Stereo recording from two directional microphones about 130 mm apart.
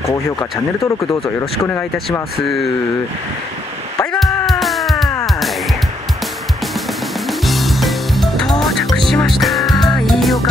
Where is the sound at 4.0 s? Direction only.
5° left (ahead or behind).